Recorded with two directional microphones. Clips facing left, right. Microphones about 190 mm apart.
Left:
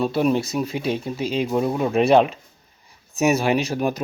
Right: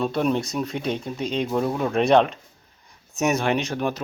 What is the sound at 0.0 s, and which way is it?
Speech, 5° left (ahead or behind).